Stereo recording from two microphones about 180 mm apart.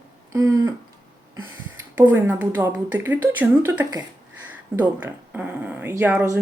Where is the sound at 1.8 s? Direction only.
10° right (ahead or behind).